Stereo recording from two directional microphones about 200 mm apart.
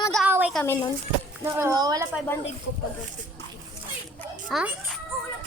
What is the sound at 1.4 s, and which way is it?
Speech, 15° right (ahead or behind).